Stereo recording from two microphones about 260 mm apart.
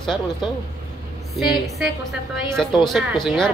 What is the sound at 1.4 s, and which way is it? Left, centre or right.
Speech, centre.